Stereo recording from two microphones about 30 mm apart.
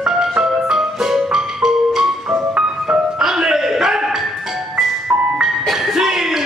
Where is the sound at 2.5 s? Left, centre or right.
Right.